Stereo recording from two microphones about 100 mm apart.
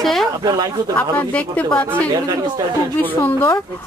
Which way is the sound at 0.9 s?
15° left (ahead or behind).